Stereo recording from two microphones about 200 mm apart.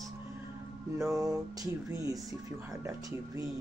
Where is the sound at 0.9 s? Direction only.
15° right (ahead or behind).